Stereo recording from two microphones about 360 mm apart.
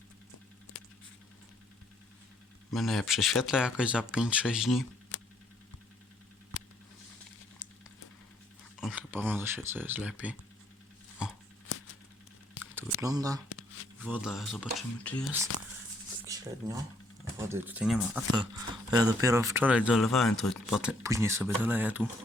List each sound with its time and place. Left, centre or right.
2.7 s speech: centre
8.8 s speech: centre
12.7 s a sound: centre
13.5 s shuffling cards: left
14.0 s speech: centre
16.2 s a sound: centre
17.3 s speech: centre